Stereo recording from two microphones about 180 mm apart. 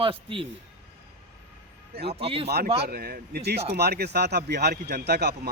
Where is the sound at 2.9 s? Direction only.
55° right (ahead or behind).